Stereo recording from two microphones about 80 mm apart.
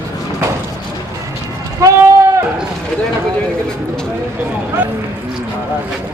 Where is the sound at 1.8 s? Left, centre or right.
Right.